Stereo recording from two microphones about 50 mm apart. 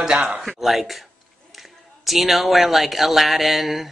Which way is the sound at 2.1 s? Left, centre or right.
Centre.